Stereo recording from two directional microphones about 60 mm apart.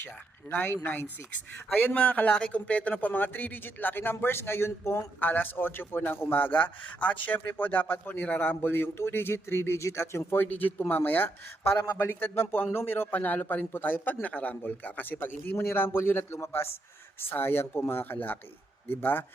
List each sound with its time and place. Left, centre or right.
0.5 s speech: centre
0.9 s a man's voice: left
10.3 s a man's voice: left